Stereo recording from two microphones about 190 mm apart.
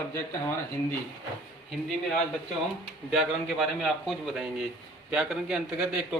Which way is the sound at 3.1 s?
Centre (ahead or behind).